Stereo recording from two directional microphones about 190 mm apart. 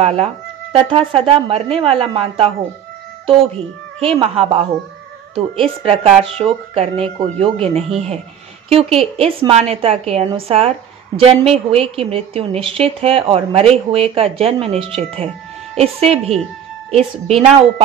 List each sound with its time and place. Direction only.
0.0 s a woman's voice: 30° right (ahead or behind)
4.0 s a woman's voice: 30° right (ahead or behind)